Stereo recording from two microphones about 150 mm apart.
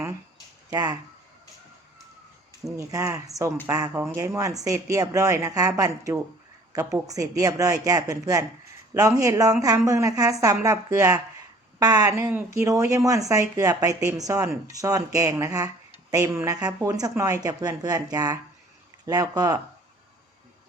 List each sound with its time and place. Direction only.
0.7 s speech: 30° right (ahead or behind)
2.6 s a woman's voice: 20° right (ahead or behind)